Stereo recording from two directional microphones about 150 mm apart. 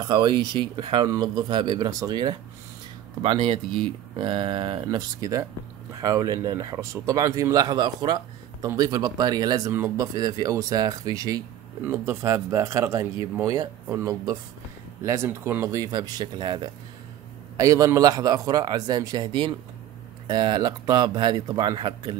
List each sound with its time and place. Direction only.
0.0 s speech: 30° right (ahead or behind)
4.8 s speech: 25° right (ahead or behind)